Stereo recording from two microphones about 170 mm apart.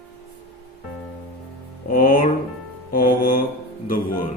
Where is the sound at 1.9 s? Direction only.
55° left (ahead or behind).